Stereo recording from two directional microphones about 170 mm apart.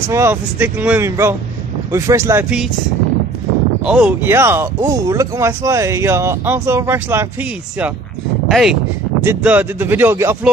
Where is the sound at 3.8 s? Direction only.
5° right (ahead or behind).